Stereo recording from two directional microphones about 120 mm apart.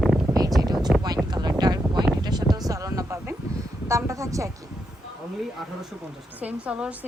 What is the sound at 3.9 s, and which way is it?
Speech, 25° right (ahead or behind).